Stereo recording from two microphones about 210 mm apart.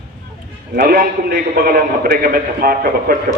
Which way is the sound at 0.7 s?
45° right (ahead or behind).